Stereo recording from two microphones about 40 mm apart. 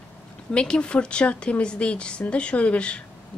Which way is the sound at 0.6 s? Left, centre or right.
Left.